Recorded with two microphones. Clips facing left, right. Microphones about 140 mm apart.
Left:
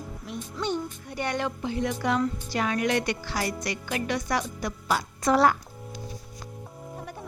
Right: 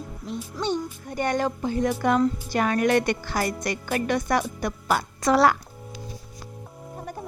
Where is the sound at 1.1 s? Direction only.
45° right (ahead or behind).